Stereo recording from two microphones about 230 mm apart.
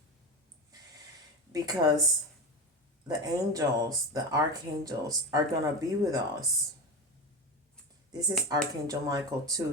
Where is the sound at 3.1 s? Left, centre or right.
Centre.